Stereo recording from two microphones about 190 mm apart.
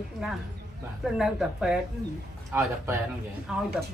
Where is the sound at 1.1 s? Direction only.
5° right (ahead or behind).